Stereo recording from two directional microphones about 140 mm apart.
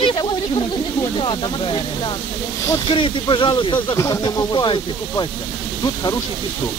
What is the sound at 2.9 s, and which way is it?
Speech, 35° left (ahead or behind).